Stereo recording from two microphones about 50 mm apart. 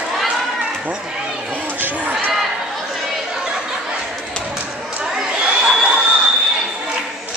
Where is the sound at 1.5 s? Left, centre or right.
Right.